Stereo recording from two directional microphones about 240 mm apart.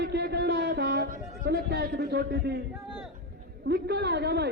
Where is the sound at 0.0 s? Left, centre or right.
Right.